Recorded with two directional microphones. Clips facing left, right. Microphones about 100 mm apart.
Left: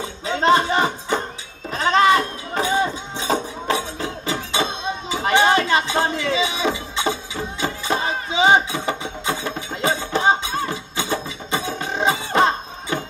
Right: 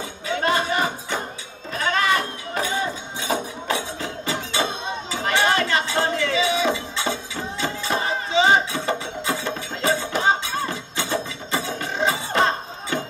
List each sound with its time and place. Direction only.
0.3 s music: 20° left (ahead or behind)
1.7 s a sound: 20° left (ahead or behind)
7.6 s music: 15° left (ahead or behind)